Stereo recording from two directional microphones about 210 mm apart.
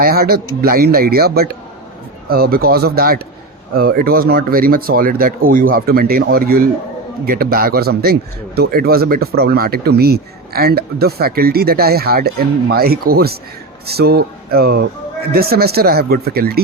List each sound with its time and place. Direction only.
0.0 s speech: 45° right (ahead or behind)